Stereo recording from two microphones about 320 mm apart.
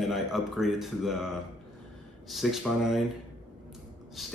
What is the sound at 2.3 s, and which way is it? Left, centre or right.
Speech, centre.